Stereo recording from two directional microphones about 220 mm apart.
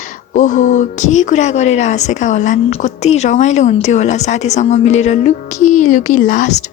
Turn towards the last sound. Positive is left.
turn(degrees=35)  # may be behind; listen again after turning